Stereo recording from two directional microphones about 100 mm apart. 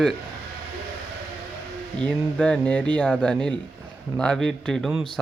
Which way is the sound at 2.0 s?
10° left (ahead or behind).